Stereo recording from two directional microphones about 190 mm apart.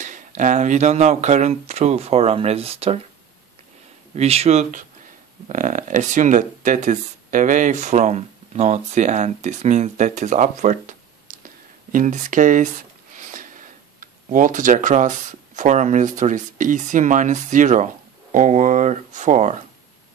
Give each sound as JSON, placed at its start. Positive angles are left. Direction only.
{"t": 0.0, "sound": "speech", "side_deg": -40}
{"t": 4.1, "sound": "speech", "side_deg": -35}